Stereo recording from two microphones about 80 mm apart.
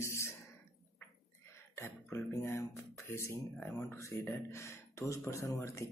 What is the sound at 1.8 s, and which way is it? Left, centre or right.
Beatboxing, left.